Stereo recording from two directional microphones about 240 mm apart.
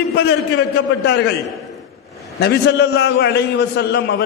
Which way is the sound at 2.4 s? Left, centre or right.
Left.